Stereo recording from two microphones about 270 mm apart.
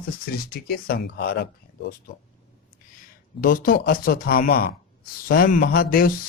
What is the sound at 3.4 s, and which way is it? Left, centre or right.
Speech, left.